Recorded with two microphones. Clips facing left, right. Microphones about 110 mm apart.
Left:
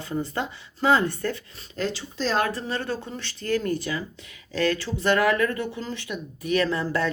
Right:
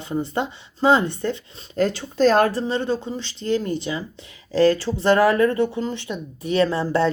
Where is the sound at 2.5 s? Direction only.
25° right (ahead or behind).